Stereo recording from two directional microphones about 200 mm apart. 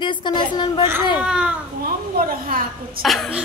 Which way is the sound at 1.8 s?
45° right (ahead or behind).